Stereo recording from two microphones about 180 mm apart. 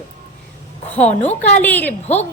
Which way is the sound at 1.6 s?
10° left (ahead or behind).